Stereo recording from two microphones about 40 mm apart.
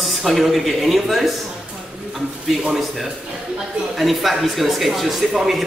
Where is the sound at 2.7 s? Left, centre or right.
Centre.